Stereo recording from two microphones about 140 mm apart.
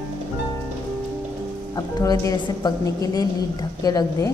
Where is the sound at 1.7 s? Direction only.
25° left (ahead or behind).